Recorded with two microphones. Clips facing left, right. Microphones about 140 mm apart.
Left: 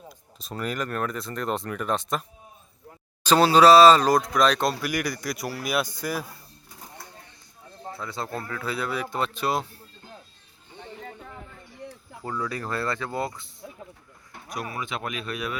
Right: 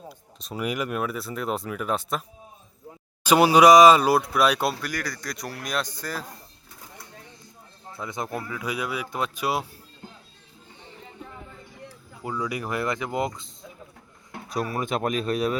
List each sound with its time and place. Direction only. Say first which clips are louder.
0.1 s speech: right 2 dB; centre (ahead or behind)
0.5 s speech: right 2 dB; 10° right (ahead or behind)
3.2 s speech: right 1 dB; 15° right (ahead or behind)
4.8 s speech: left 4 dB; 10° left (ahead or behind)
7.9 s speech: right 2 dB; 20° right (ahead or behind)
12.2 s speech: right 1 dB; 15° right (ahead or behind)
14.5 s speech: right 5 dB; 40° right (ahead or behind)